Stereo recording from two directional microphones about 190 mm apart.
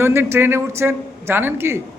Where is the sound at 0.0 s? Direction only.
10° right (ahead or behind).